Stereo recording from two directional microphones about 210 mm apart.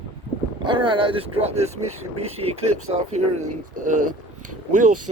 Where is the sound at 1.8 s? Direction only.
90° right.